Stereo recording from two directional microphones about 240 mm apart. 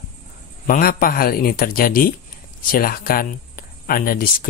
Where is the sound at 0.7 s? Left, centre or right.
Left.